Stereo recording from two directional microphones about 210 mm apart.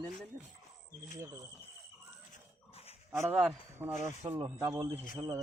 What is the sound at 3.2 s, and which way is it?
Speech, 5° right (ahead or behind).